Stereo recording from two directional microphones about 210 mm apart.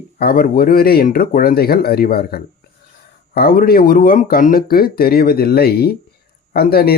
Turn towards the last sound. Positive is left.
turn(degrees=45)  # may be behind; listen again after turning